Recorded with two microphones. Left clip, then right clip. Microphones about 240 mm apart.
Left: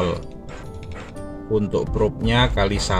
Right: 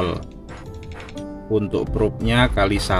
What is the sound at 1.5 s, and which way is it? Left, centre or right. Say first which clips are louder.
Speech: even; right.